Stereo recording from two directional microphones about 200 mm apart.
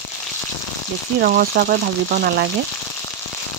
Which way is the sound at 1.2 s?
45° right (ahead or behind).